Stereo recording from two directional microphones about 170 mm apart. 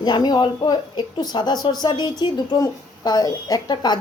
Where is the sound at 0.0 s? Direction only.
25° left (ahead or behind).